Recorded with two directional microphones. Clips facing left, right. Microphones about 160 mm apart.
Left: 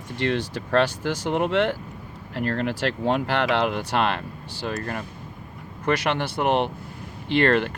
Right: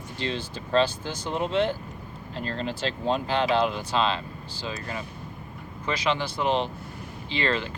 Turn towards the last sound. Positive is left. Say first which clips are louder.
# left 7 dB
turn(degrees=65)  # may be behind; listen again after turning